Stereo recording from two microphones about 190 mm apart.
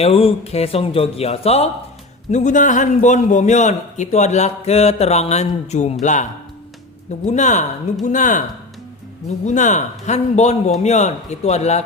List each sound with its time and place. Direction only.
0.0 s a man's voice: 30° left (ahead or behind)
7.3 s a man's voice: 40° left (ahead or behind)
9.5 s a man's voice: 40° left (ahead or behind)